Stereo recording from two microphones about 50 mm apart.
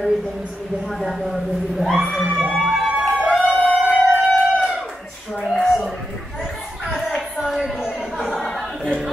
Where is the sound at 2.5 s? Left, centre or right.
Centre.